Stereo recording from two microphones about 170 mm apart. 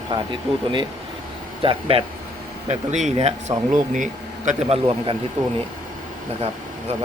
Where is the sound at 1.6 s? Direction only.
30° right (ahead or behind).